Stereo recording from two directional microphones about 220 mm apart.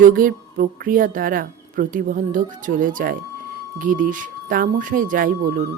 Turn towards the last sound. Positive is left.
turn(degrees=-40)  # may be behind; listen again after turning